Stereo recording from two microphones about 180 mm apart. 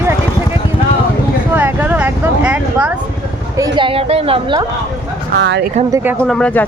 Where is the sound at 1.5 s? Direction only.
10° right (ahead or behind).